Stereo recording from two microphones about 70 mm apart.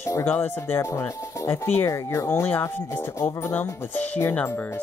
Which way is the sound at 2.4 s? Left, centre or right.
Left.